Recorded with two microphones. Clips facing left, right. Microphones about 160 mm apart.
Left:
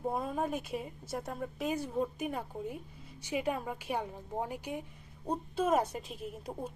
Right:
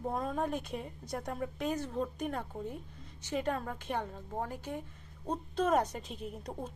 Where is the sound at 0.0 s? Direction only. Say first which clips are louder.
Even; 10° left (ahead or behind).